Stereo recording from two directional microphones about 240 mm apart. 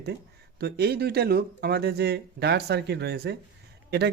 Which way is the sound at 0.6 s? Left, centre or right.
Right.